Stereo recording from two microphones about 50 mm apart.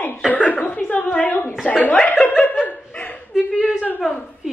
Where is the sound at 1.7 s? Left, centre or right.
Left.